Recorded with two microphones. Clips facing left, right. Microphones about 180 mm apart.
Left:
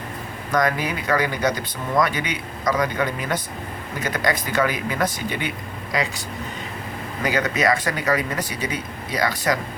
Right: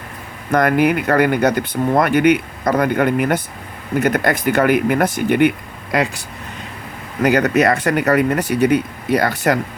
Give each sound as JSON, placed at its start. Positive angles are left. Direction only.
{"t": 0.5, "sound": "speech", "side_deg": -60}
{"t": 7.2, "sound": "speech", "side_deg": -65}